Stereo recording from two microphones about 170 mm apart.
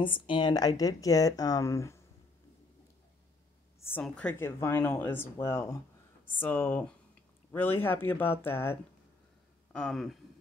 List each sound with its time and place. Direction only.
0.0 s speech: 30° left (ahead or behind)
4.0 s speech: 5° left (ahead or behind)